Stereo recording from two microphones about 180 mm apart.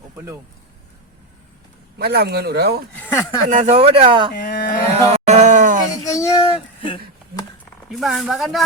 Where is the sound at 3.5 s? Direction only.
40° right (ahead or behind).